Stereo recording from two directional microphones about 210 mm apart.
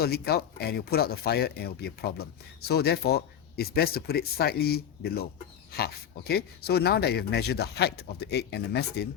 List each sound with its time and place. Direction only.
0.0 s speech: 50° left (ahead or behind)